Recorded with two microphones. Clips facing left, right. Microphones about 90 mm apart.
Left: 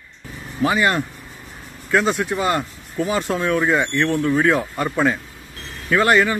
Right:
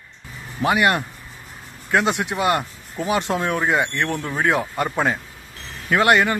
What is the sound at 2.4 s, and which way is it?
A man's voice, 20° right (ahead or behind).